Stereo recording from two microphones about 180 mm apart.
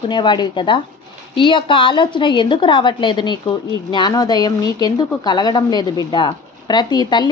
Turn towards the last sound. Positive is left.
turn(degrees=25)  # may be behind; listen again after turning